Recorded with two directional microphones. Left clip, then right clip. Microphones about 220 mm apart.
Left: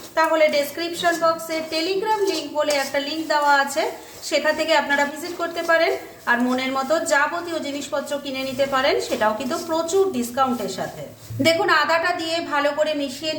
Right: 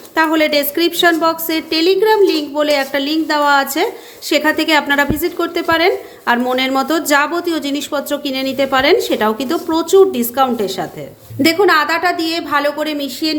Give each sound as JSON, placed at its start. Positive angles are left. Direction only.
{"t": 0.1, "sound": "a woman's voice", "side_deg": -45}